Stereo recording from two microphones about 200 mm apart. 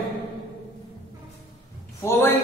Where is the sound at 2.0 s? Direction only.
10° left (ahead or behind).